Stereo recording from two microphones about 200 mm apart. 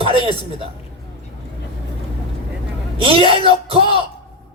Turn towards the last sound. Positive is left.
turn(degrees=-25)  # may be behind; listen again after turning